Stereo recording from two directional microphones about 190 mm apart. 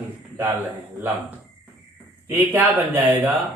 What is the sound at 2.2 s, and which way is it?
Speech, 10° right (ahead or behind).